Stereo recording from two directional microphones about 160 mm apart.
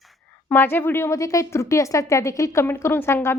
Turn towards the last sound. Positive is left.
turn(degrees=15)  # may be behind; listen again after turning